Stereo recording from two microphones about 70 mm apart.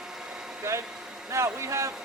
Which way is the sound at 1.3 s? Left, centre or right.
Right.